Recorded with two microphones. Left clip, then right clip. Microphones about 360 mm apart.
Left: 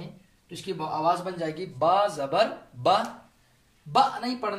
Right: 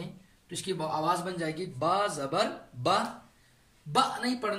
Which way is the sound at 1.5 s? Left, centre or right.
Left.